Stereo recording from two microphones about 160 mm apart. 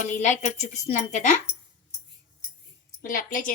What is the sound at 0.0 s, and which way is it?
Speech, 50° left (ahead or behind).